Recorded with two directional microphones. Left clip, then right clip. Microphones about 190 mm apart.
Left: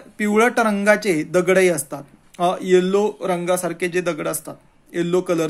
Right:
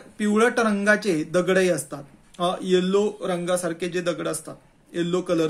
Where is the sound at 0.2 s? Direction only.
35° left (ahead or behind).